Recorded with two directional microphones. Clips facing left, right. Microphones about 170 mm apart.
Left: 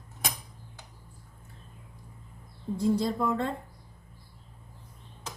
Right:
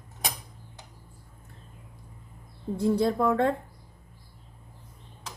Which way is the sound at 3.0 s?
60° right (ahead or behind).